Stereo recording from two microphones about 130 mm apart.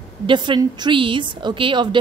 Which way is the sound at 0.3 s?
35° right (ahead or behind).